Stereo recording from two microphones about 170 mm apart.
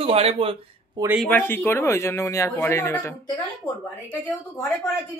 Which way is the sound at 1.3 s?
10° left (ahead or behind).